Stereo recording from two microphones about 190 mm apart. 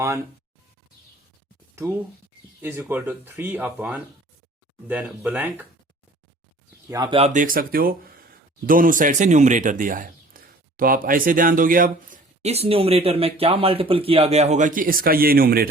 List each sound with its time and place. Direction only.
1.7 s speech: 10° right (ahead or behind)
6.9 s speech: 25° right (ahead or behind); by 15.7 s 50° right (ahead or behind)